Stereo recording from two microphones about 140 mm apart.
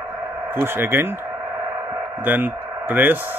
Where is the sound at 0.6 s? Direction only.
15° right (ahead or behind).